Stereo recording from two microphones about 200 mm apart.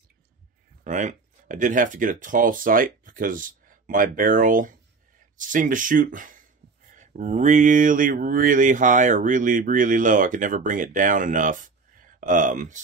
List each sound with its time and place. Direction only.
0.8 s speech: 40° right (ahead or behind)